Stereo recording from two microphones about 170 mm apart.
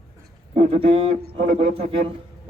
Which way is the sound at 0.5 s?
40° right (ahead or behind).